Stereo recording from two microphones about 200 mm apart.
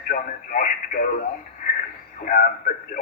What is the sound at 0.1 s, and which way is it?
Speech, 40° left (ahead or behind).